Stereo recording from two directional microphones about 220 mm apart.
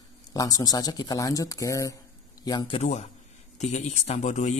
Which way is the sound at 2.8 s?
30° left (ahead or behind).